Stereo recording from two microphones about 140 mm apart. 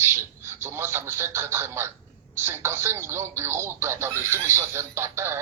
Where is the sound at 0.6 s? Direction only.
15° right (ahead or behind).